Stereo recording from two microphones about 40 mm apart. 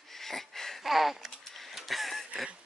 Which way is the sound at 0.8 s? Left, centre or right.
Centre.